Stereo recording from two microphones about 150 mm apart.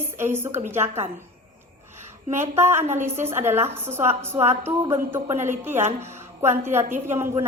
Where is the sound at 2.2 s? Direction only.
50° right (ahead or behind).